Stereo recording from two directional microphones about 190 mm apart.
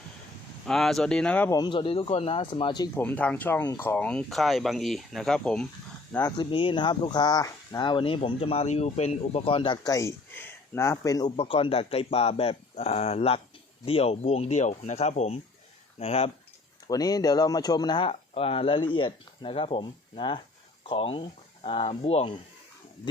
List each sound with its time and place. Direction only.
0.6 s speech: centre (ahead or behind)
1.5 s speech: 25° left (ahead or behind)
3.0 s speech: 5° left (ahead or behind)
6.3 s speech: 25° left (ahead or behind)
16.8 s speech: 20° left (ahead or behind)